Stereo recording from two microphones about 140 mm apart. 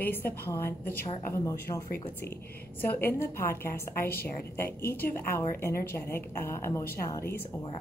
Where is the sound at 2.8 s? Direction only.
15° left (ahead or behind).